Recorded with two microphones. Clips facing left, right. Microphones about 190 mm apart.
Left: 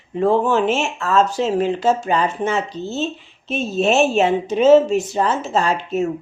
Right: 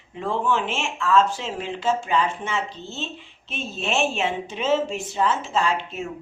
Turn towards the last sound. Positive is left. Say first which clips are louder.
# left 5 dB
turn(degrees=40)  # may be behind; listen again after turning